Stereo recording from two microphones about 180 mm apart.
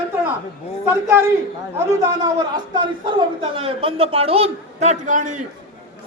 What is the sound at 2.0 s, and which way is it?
A man's voice, 25° right (ahead or behind).